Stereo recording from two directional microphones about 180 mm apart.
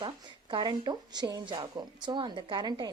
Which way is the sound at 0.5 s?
25° right (ahead or behind).